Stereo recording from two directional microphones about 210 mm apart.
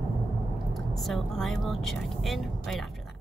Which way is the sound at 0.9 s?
Centre (ahead or behind).